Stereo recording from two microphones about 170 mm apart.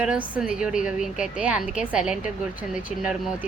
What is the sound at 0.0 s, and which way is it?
A woman's voice, 5° right (ahead or behind).